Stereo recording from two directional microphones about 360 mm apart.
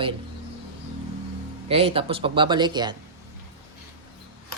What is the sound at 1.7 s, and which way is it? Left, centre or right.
Speech, centre.